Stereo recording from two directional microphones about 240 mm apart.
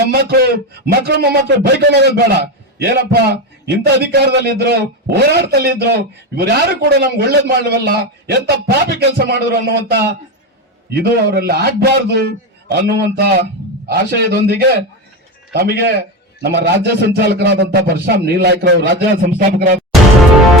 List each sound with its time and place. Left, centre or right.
0.0 s a man's voice: right